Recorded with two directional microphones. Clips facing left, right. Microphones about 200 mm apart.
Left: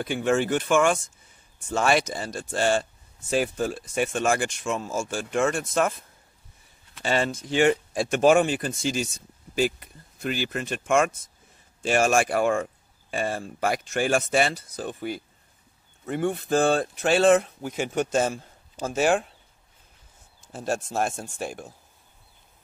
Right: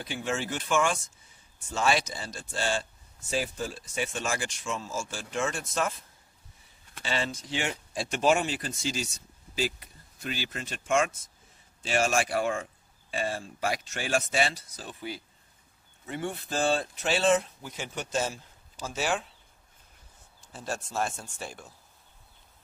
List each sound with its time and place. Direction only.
0.0 s speech: 55° left (ahead or behind)
7.0 s speech: 50° left (ahead or behind)
20.5 s speech: 50° left (ahead or behind)